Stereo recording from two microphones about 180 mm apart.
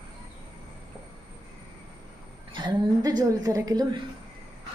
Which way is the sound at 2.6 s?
20° right (ahead or behind).